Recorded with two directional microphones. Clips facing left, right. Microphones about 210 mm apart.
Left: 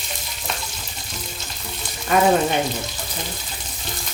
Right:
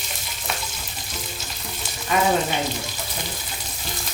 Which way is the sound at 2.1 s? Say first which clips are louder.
Left 4 dB; 50° left (ahead or behind).